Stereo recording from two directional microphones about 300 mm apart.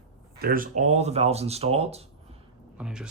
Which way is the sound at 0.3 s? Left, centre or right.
Right.